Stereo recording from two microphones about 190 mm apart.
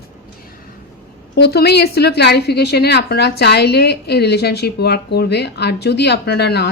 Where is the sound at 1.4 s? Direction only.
60° left (ahead or behind).